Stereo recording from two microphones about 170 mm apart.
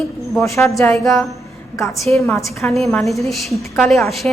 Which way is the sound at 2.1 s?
10° left (ahead or behind).